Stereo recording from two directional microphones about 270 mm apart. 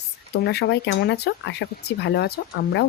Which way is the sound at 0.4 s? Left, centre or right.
Left.